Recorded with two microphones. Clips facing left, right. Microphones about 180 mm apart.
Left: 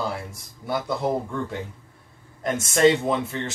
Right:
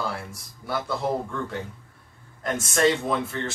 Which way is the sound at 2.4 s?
20° left (ahead or behind).